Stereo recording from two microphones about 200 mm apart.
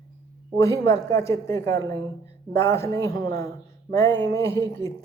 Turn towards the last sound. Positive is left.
turn(degrees=15)  # may be behind; listen again after turning